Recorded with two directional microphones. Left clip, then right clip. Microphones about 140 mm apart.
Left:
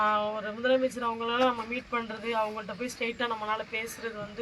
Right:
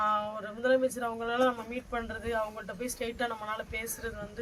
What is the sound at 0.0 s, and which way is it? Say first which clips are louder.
Speech: left 3 dB; 20° right (ahead or behind).